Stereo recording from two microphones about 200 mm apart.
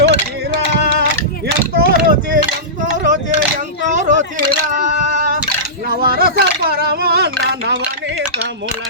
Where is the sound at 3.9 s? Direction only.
40° right (ahead or behind); by 7.8 s 60° right (ahead or behind).